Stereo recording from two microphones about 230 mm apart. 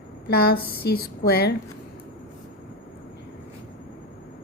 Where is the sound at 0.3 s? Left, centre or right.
Left.